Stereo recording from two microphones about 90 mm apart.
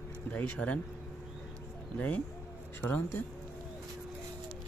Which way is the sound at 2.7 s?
20° left (ahead or behind).